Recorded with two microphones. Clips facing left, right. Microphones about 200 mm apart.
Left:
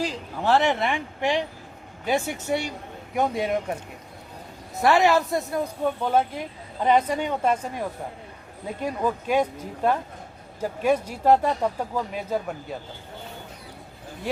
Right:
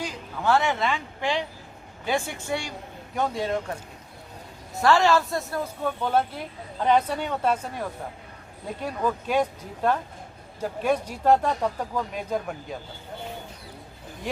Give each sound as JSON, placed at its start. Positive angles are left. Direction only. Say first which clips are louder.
{"t": 0.3, "sound": "speech", "louder": "left 2 dB", "side_deg": 30}
{"t": 0.8, "sound": "speech", "louder": "left 2 dB", "side_deg": 15}
{"t": 4.8, "sound": "speech", "louder": "left 1 dB", "side_deg": 20}